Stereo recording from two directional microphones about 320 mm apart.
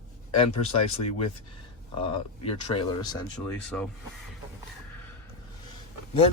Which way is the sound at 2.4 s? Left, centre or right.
Centre.